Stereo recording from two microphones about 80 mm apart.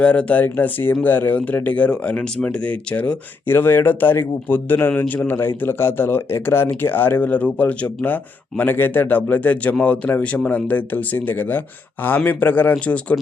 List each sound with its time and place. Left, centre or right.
0.0 s speech: centre